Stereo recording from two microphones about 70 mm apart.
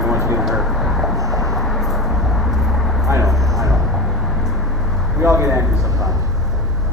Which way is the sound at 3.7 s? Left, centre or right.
Centre.